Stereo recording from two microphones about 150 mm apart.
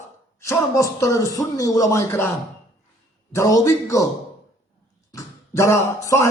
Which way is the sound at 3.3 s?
20° left (ahead or behind).